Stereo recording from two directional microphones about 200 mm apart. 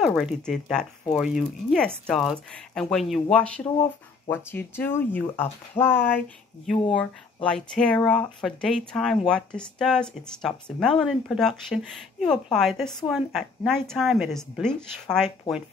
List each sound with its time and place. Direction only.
0.0 s speech: centre (ahead or behind)
7.4 s speech: 5° left (ahead or behind)